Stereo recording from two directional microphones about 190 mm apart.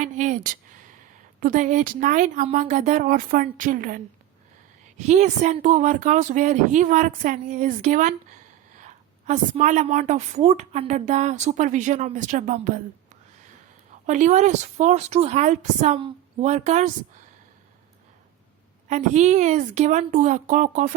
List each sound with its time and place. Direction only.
0.0 s a sound: 40° right (ahead or behind)
1.4 s speech: 45° right (ahead or behind)
5.0 s a woman's voice: 35° right (ahead or behind)
14.1 s a woman's voice: 40° right (ahead or behind)
18.9 s a woman's voice: 40° right (ahead or behind)